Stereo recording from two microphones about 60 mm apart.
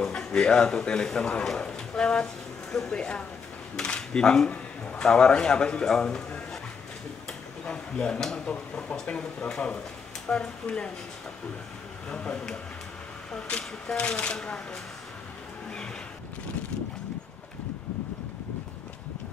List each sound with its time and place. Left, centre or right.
0.0 s a man's voice: centre
12.1 s speech: centre